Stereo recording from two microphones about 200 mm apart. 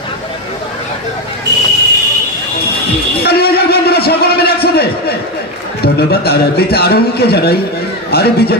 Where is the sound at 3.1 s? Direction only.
50° left (ahead or behind).